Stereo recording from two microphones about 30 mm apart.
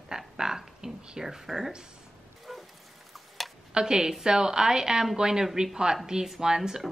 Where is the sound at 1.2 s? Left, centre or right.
Centre.